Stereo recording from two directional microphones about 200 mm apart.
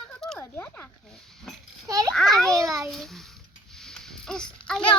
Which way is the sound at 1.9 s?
15° right (ahead or behind).